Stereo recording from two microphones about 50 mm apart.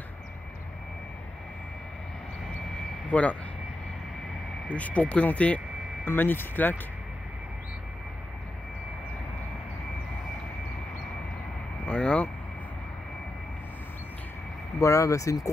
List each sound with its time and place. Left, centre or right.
3.1 s speech: left
4.6 s speech: left
6.0 s speech: left
11.8 s vehicle: left
14.8 s speech: left